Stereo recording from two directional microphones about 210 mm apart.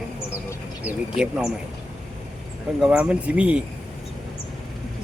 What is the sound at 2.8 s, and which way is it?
Speech, 5° right (ahead or behind).